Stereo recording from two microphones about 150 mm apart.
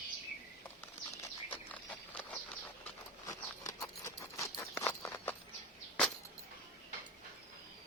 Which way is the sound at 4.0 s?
20° left (ahead or behind).